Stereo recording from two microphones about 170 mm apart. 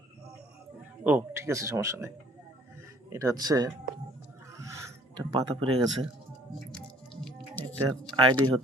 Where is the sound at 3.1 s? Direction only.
20° right (ahead or behind).